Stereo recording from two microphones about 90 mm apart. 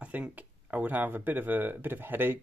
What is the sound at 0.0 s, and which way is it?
Speech, 15° right (ahead or behind).